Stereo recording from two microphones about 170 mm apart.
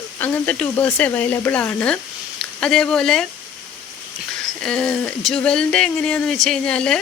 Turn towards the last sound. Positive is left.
turn(degrees=5)  # may be behind; listen again after turning